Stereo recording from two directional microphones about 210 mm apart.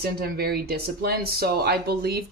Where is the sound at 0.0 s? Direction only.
50° right (ahead or behind).